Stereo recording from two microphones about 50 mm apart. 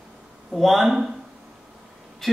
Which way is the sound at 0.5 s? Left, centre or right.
Centre.